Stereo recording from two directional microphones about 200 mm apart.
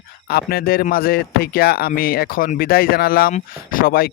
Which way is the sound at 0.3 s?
50° left (ahead or behind).